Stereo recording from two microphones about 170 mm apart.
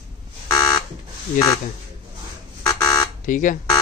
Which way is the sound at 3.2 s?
50° left (ahead or behind).